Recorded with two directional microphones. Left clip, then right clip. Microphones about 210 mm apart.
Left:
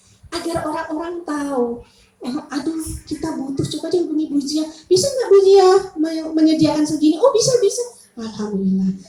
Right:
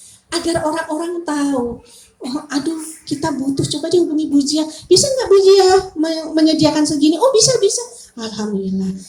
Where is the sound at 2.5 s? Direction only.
50° right (ahead or behind).